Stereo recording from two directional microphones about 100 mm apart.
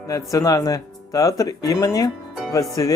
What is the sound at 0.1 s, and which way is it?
Speech, 35° left (ahead or behind).